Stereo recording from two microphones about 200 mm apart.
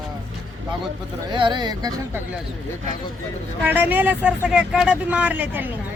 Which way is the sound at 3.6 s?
10° right (ahead or behind).